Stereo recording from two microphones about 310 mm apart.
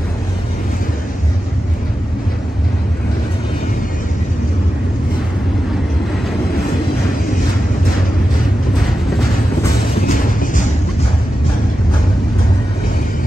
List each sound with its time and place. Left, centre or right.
10.0 s music: left